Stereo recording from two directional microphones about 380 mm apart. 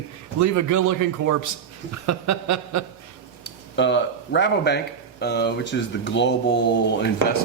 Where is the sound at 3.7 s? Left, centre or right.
Left.